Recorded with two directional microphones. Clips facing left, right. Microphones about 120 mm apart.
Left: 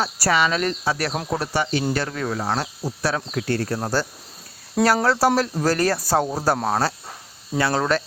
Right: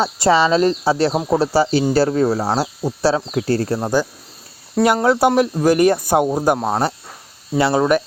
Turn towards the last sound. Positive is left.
turn(degrees=-15)  # may be behind; listen again after turning